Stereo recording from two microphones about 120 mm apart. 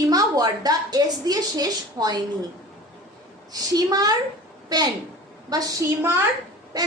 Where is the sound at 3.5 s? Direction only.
35° right (ahead or behind).